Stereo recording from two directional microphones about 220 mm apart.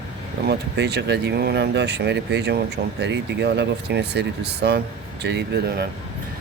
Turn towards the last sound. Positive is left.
turn(degrees=-45)  # may be behind; listen again after turning